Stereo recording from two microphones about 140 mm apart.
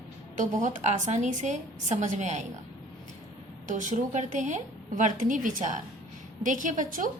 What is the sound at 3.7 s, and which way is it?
A woman's voice, 65° right (ahead or behind).